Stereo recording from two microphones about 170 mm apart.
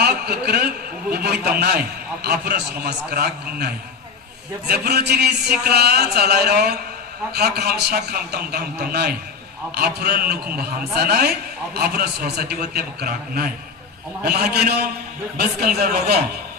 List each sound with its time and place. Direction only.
0.0 s a man's voice: 65° right (ahead or behind)
4.7 s a man's voice: 70° right (ahead or behind)